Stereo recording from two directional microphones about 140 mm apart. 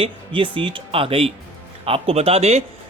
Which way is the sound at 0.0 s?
40° right (ahead or behind).